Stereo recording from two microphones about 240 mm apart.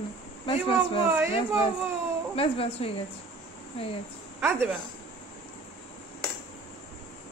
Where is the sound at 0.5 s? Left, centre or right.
Left.